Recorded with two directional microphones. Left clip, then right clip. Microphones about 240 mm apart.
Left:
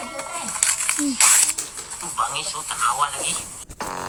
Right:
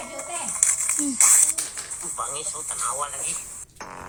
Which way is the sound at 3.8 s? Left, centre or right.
Left.